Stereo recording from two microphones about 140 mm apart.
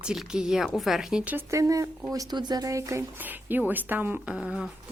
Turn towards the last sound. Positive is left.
turn(degrees=-10)  # may be behind; listen again after turning